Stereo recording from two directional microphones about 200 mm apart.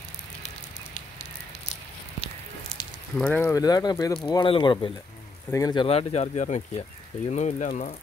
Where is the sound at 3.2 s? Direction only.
5° left (ahead or behind); by 7.9 s 35° left (ahead or behind).